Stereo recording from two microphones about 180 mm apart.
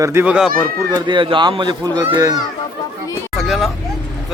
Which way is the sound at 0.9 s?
25° right (ahead or behind).